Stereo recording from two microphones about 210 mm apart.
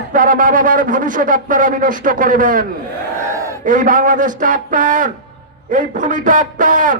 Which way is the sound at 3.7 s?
40° right (ahead or behind).